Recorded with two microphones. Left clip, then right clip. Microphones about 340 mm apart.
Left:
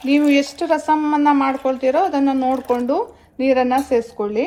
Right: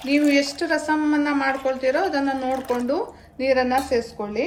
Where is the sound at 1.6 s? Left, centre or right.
Left.